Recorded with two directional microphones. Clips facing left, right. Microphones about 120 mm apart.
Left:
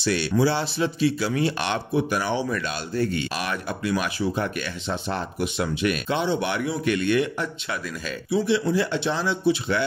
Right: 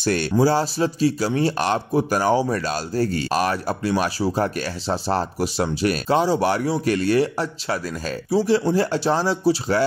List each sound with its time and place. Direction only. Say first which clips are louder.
0.0 s a man's voice: right 3 dB; 45° right (ahead or behind)